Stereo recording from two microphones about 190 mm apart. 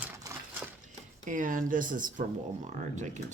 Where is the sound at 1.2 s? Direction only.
45° right (ahead or behind).